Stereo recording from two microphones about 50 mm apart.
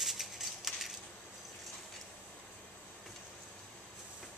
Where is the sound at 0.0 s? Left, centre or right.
Centre.